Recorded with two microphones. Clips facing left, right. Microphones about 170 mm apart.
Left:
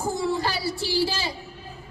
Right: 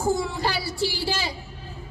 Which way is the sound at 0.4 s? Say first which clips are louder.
Right 2 dB; 15° right (ahead or behind).